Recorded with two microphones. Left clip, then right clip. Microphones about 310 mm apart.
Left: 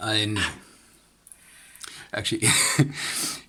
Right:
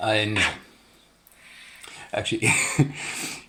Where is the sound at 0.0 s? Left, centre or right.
Left.